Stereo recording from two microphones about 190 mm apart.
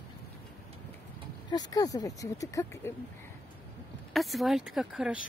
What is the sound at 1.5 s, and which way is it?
Speech, 20° left (ahead or behind).